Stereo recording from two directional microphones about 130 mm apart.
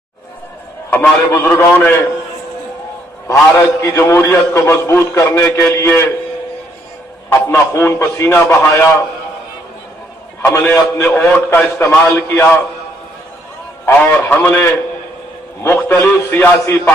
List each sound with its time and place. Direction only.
0.8 s a man's voice: 15° left (ahead or behind)
3.3 s a man's voice: 25° left (ahead or behind)
7.4 s a man's voice: 20° left (ahead or behind)
10.4 s a man's voice: 20° left (ahead or behind)
13.8 s a man's voice: 15° left (ahead or behind)